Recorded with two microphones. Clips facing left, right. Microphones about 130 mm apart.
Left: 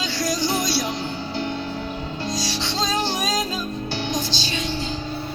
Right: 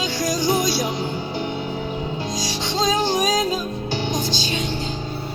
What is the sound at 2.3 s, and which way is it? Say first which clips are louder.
Music: even; 50° right (ahead or behind).